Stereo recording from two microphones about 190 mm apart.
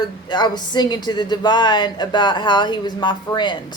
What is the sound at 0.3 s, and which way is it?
A woman's voice, 20° left (ahead or behind).